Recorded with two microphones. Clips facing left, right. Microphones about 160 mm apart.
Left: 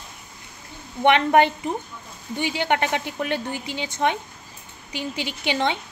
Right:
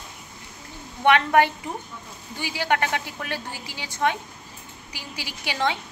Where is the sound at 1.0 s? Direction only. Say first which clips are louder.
Left 2 dB; 20° left (ahead or behind).